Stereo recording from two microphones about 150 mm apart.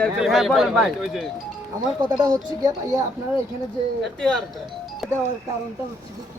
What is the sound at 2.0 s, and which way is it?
Speech, 30° right (ahead or behind).